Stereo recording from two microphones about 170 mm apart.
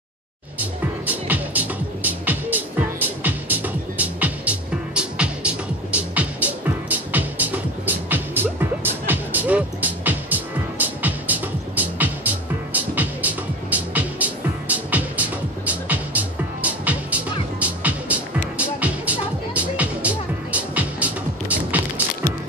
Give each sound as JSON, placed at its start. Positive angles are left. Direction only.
{"t": 0.6, "sound": "music", "side_deg": -10}